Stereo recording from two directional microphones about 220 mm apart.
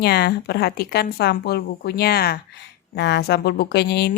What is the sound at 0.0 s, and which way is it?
A woman's voice, 50° left (ahead or behind).